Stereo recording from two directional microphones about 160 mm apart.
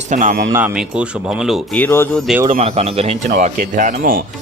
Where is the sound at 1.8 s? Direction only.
15° left (ahead or behind).